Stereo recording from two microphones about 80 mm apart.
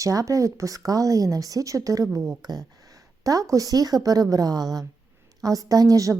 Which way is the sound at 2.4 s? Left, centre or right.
Right.